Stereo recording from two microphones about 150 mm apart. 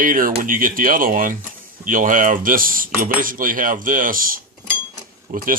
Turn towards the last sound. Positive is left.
turn(degrees=-70)  # may be behind; listen again after turning